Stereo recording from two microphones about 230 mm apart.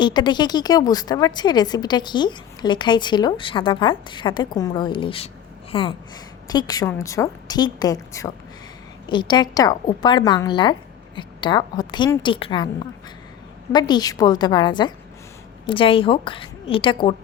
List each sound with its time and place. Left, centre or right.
0.0 s a woman's voice: centre
13.7 s a woman's voice: centre